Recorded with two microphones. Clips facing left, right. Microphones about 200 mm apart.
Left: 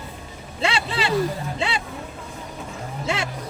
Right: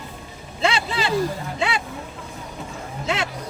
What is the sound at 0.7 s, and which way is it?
Speech, 30° left (ahead or behind).